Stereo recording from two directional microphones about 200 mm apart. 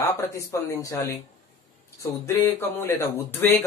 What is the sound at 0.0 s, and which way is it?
Speech, 15° left (ahead or behind).